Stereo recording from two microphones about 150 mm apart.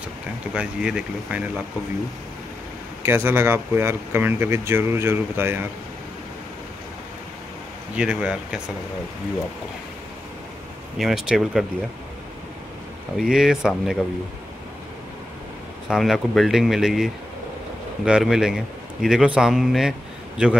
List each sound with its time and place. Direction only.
0.6 s a man's voice: 5° right (ahead or behind)
3.0 s speech: 15° right (ahead or behind)
7.9 s speech: 5° right (ahead or behind)
11.0 s a man's voice: 5° right (ahead or behind)
13.3 s a man's voice: 5° right (ahead or behind)
15.9 s a man's voice: centre (ahead or behind)